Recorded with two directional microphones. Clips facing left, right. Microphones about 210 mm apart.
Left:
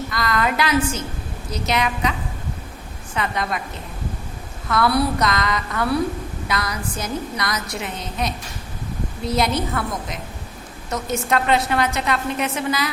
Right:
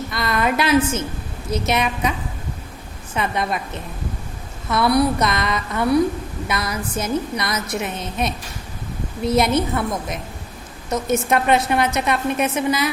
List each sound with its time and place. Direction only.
0.1 s a woman's voice: 25° right (ahead or behind)
3.2 s a woman's voice: 25° right (ahead or behind)
4.7 s a woman's voice: 20° right (ahead or behind)